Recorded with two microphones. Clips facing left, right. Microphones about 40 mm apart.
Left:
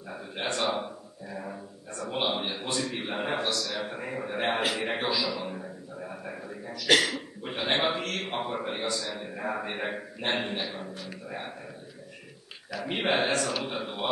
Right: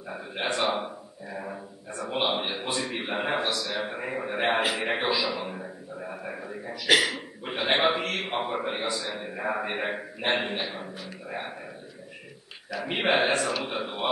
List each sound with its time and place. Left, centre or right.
0.1 s speech: centre
12.8 s speech: centre